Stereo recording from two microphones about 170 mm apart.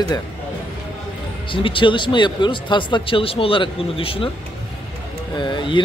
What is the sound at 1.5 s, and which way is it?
Speech, 30° left (ahead or behind).